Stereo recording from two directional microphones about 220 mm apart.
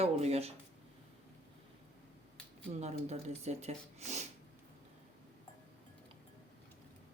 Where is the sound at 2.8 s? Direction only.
30° right (ahead or behind).